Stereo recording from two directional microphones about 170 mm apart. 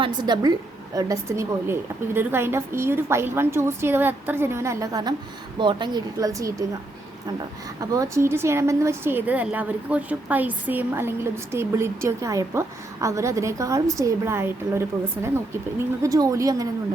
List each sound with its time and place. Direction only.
0.0 s a woman's voice: 25° right (ahead or behind)
7.8 s a woman's voice: 20° right (ahead or behind)